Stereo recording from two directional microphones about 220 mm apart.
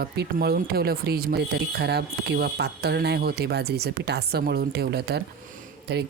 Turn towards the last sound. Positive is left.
turn(degrees=-45)  # may be behind; listen again after turning